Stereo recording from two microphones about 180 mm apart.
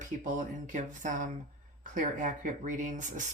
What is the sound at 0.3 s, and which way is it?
Speech, 45° right (ahead or behind).